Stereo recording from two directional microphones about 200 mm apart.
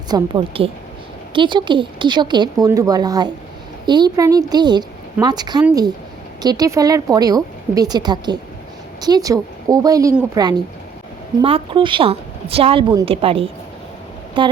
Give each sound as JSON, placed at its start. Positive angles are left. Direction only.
{"t": 0.1, "sound": "a woman's voice", "side_deg": -25}